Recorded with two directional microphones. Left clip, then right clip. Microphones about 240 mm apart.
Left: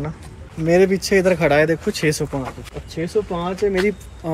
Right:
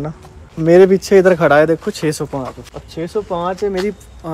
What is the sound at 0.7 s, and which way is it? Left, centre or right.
A man's voice, right.